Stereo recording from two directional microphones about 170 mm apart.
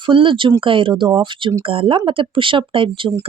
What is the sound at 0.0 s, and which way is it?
A woman's voice, 30° right (ahead or behind).